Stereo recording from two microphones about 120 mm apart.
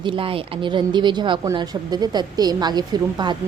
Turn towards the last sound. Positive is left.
turn(degrees=-35)  # may be behind; listen again after turning